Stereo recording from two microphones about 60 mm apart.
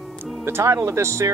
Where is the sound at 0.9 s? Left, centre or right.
Right.